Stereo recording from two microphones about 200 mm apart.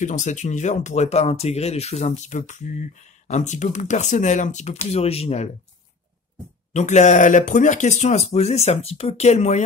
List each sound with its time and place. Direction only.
0.0 s speech: 35° left (ahead or behind)
6.7 s speech: 35° left (ahead or behind)